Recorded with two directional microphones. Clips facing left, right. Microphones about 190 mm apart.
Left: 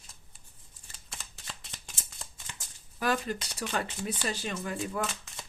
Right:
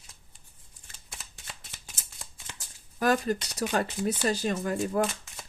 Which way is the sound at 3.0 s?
45° right (ahead or behind).